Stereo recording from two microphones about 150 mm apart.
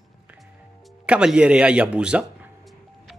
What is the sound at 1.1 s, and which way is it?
Speech, 5° right (ahead or behind).